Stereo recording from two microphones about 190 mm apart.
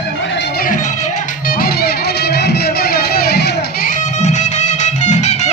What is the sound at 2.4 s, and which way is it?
Music, 55° left (ahead or behind).